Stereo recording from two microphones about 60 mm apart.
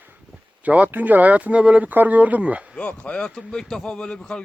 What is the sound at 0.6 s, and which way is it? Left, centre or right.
Speech, right.